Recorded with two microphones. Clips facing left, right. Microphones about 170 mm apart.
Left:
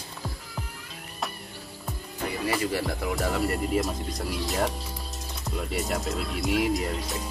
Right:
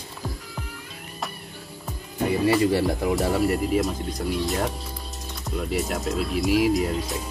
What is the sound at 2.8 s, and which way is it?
Speech, 20° right (ahead or behind).